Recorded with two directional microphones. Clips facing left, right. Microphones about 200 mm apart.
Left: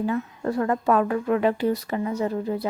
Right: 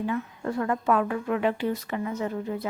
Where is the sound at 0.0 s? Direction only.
35° left (ahead or behind).